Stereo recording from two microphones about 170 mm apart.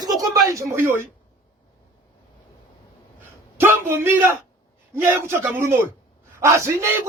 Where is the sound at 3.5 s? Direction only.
15° right (ahead or behind).